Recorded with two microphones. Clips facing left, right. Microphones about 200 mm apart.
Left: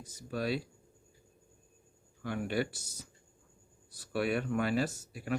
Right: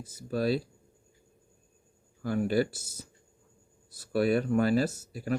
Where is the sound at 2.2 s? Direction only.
40° right (ahead or behind).